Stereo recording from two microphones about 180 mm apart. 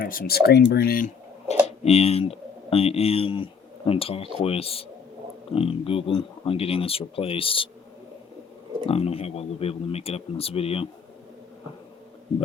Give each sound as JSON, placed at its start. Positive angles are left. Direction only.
{"t": 0.0, "sound": "speech", "side_deg": 55}
{"t": 1.8, "sound": "speech", "side_deg": 35}
{"t": 8.9, "sound": "speech", "side_deg": 35}